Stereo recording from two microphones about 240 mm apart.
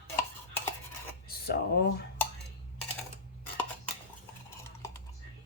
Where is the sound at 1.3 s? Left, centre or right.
Left.